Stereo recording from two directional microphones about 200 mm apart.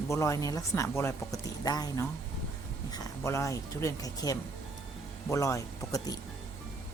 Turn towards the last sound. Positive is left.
turn(degrees=15)  # may be behind; listen again after turning